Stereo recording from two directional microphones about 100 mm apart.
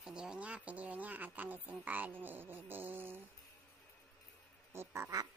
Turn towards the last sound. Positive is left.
turn(degrees=-25)  # may be behind; listen again after turning